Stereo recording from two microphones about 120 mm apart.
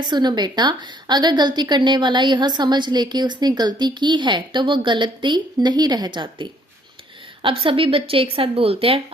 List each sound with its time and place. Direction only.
0.0 s a woman's voice: 35° right (ahead or behind); by 9.0 s 55° right (ahead or behind)